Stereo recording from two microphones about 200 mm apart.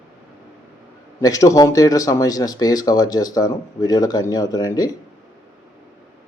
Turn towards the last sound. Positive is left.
turn(degrees=20)  # may be behind; listen again after turning